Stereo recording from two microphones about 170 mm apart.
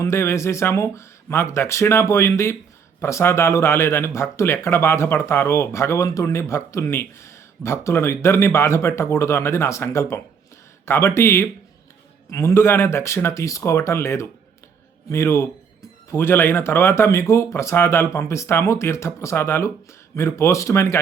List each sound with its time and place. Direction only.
0.0 s speech: 15° left (ahead or behind)